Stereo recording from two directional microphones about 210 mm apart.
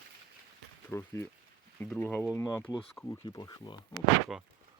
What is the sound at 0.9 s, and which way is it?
Speech, 10° left (ahead or behind).